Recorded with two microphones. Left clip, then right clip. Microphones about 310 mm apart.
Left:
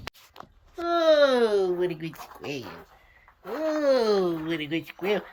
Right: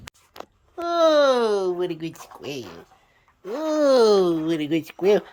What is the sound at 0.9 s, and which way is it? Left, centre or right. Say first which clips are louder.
Speech: right 3 dB; centre.